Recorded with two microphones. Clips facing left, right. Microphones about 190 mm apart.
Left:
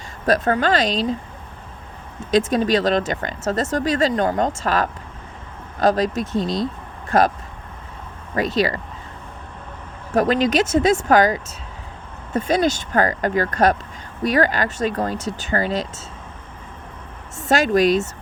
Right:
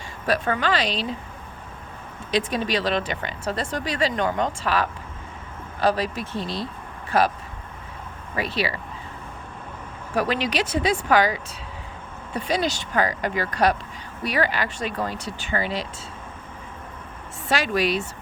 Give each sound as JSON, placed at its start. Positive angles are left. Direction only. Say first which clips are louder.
{"t": 0.3, "sound": "speech", "louder": "left 5 dB", "side_deg": 40}
{"t": 2.3, "sound": "speech", "louder": "left 6 dB", "side_deg": 45}
{"t": 8.4, "sound": "speech", "louder": "left 6 dB", "side_deg": 45}
{"t": 10.2, "sound": "speech", "louder": "left 6 dB", "side_deg": 45}
{"t": 17.5, "sound": "speech", "louder": "left 7 dB", "side_deg": 45}